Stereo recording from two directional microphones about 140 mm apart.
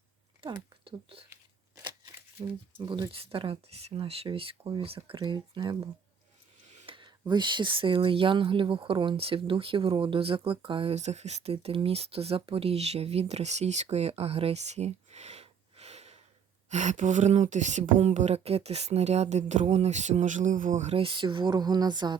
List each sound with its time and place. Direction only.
0.4 s speech: 40° right (ahead or behind)
2.4 s speech: 40° right (ahead or behind)
6.8 s speech: 35° right (ahead or behind)